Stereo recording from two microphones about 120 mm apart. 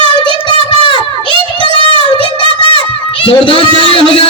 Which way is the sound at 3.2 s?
45° left (ahead or behind).